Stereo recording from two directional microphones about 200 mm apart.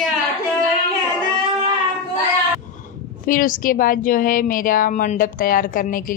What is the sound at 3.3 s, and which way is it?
A woman's voice, 45° left (ahead or behind).